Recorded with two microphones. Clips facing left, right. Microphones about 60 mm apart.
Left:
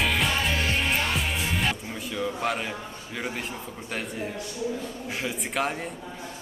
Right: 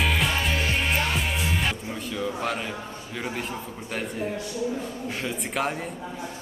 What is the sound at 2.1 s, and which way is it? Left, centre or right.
Speech, centre.